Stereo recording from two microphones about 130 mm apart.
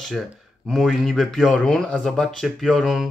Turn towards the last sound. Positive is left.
turn(degrees=0)  # may be behind; listen again after turning